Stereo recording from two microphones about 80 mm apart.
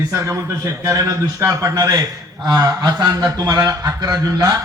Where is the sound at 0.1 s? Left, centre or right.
Right.